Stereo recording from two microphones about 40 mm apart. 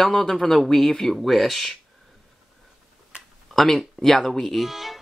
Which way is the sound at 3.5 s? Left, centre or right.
Centre.